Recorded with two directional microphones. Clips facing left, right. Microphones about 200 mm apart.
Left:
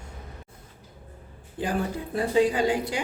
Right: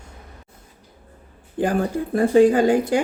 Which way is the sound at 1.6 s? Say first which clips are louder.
Right 7 dB; 50° right (ahead or behind).